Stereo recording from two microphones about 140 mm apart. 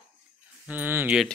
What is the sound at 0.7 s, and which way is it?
Speech, 15° right (ahead or behind).